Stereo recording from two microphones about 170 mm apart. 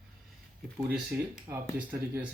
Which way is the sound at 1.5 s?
15° right (ahead or behind).